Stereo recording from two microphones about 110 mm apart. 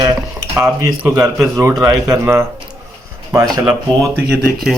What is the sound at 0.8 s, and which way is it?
A man's voice, 30° right (ahead or behind).